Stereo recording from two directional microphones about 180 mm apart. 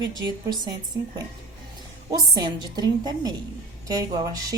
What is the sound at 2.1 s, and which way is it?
A woman's voice, 20° right (ahead or behind).